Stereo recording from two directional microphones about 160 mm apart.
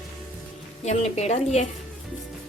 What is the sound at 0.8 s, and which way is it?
Speech, 45° left (ahead or behind).